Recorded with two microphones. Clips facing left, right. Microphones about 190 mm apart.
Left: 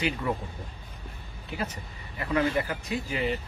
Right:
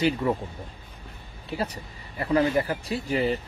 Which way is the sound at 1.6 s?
35° right (ahead or behind).